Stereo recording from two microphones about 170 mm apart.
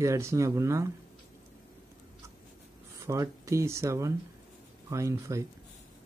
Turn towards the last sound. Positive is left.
turn(degrees=-20)  # may be behind; listen again after turning